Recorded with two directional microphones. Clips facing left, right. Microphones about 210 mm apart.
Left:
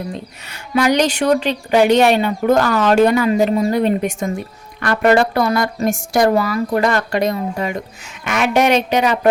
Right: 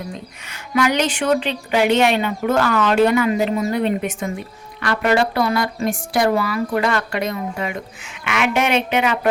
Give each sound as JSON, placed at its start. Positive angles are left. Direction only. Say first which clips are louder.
{"t": 0.7, "sound": "speech", "louder": "left 3 dB", "side_deg": 35}